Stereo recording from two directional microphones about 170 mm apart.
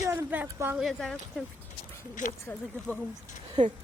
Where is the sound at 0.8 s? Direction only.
Centre (ahead or behind).